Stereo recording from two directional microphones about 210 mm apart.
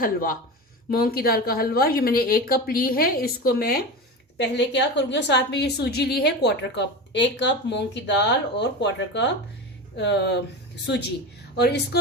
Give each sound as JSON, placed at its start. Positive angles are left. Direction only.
{"t": 0.0, "sound": "a woman's voice", "side_deg": 40}
{"t": 4.4, "sound": "a woman's voice", "side_deg": 55}
{"t": 11.5, "sound": "a woman's voice", "side_deg": 50}